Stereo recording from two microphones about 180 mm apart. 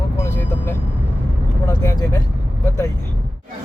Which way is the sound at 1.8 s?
15° left (ahead or behind).